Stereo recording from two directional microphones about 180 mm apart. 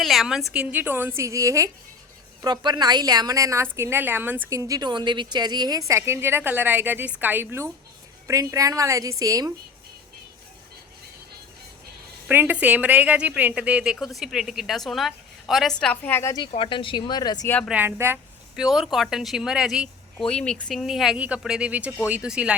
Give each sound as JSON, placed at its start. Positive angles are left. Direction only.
{"t": 0.0, "sound": "a woman's voice", "side_deg": 0}
{"t": 12.3, "sound": "speech", "side_deg": -10}
{"t": 16.5, "sound": "speech", "side_deg": 30}
{"t": 17.7, "sound": "speech", "side_deg": -10}